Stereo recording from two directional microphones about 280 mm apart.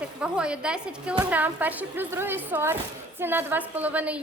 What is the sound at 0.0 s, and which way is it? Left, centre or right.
A woman's voice, centre.